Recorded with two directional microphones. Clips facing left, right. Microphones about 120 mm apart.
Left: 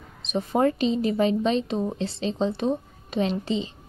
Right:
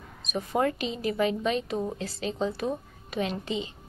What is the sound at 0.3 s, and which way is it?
A woman's voice, 25° left (ahead or behind).